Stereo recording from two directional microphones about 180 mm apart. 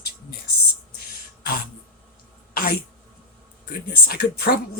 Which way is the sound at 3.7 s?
55° left (ahead or behind).